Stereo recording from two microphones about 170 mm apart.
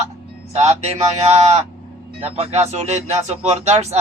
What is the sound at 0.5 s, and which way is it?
A man's voice, 40° right (ahead or behind).